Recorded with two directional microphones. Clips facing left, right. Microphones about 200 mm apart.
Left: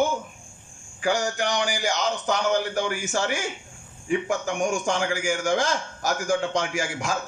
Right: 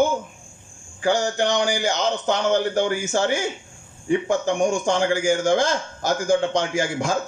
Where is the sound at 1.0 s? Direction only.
25° right (ahead or behind).